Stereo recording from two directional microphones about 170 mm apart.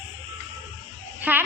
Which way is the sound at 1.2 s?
10° right (ahead or behind).